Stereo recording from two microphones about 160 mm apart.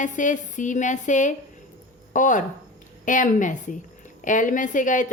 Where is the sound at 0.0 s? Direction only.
50° left (ahead or behind).